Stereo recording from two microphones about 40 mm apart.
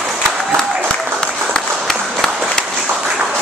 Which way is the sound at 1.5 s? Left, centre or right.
Centre.